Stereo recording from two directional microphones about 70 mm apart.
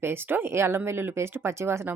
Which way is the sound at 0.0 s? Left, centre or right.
Right.